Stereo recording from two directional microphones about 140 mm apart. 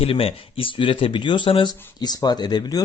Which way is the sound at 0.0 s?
40° left (ahead or behind).